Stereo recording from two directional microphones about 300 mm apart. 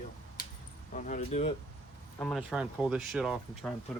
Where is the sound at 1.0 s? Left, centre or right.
Left.